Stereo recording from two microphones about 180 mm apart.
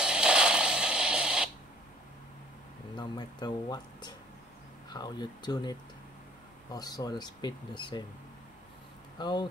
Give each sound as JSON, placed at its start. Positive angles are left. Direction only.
{"t": 0.0, "sound": "radio", "side_deg": -5}
{"t": 3.0, "sound": "speech", "side_deg": 25}
{"t": 9.2, "sound": "speech", "side_deg": 25}